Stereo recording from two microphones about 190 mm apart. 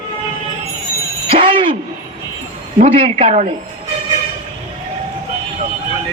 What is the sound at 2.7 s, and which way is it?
Speech, 35° right (ahead or behind).